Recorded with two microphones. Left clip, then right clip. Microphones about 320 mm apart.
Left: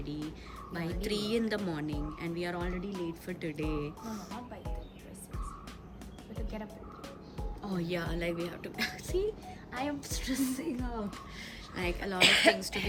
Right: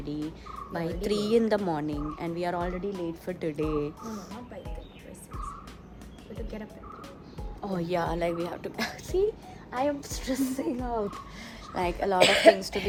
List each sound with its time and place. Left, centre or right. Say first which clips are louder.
0.0 s speech: right 5 dB; centre
7.6 s speech: right 7 dB; centre